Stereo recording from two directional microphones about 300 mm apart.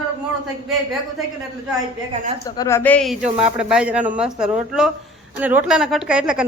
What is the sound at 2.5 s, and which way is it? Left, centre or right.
Speech, centre.